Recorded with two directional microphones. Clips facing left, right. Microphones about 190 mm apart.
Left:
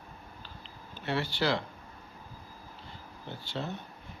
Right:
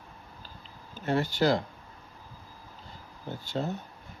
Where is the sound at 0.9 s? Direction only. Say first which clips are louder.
Right 5 dB; 45° right (ahead or behind).